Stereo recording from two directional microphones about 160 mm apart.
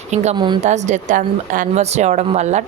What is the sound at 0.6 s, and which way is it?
Speech, 45° right (ahead or behind).